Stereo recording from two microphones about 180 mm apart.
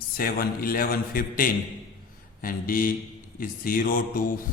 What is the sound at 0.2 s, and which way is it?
A man's voice, 55° left (ahead or behind).